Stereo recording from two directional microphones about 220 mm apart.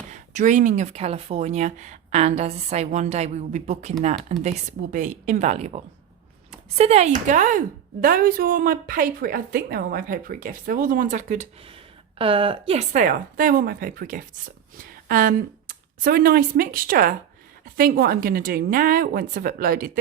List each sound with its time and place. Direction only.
0.1 s speech: 35° right (ahead or behind)